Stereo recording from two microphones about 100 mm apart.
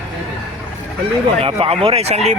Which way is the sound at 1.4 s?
70° right (ahead or behind).